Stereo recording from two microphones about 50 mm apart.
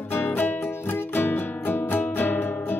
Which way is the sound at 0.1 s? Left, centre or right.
Left.